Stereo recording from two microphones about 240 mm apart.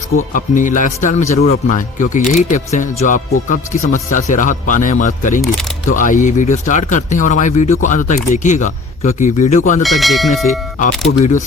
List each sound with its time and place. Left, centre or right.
0.3 s speech: left
9.8 s speech: centre
11.1 s speech: left